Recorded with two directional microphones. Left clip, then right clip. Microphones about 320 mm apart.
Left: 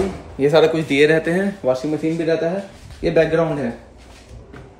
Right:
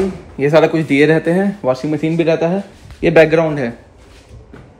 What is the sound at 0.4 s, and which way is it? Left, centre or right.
Speech, right.